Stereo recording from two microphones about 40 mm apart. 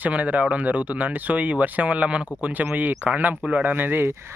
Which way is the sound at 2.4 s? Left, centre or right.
Right.